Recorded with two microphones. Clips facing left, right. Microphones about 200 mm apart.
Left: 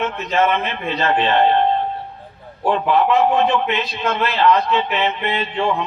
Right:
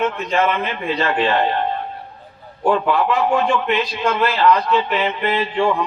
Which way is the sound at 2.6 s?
25° left (ahead or behind).